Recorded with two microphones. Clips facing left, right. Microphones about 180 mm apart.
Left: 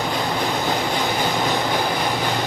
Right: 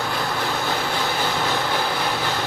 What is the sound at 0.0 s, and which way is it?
Vehicle, 20° left (ahead or behind).